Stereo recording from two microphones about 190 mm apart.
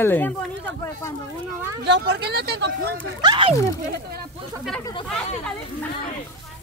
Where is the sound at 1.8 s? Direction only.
60° right (ahead or behind).